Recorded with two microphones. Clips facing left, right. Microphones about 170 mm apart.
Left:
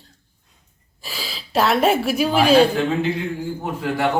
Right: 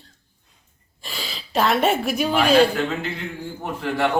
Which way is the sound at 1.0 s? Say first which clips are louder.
Left 1 dB; centre (ahead or behind).